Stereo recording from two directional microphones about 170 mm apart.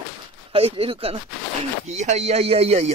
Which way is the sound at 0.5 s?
35° right (ahead or behind).